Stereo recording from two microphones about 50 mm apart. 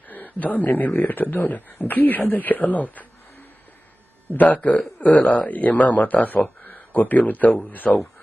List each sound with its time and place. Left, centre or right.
0.1 s a man's voice: left
4.4 s a man's voice: left